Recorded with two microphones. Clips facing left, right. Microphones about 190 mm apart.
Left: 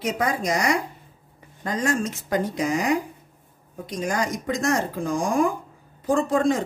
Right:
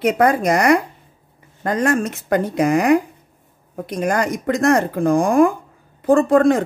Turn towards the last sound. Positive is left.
turn(degrees=-60)  # may be behind; listen again after turning